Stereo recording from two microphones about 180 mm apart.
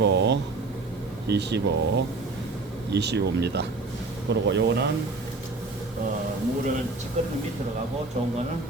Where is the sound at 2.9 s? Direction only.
70° right (ahead or behind).